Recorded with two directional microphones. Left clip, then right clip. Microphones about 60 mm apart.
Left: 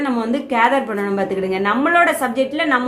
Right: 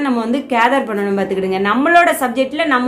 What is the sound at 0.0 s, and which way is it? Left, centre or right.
A woman's voice, right.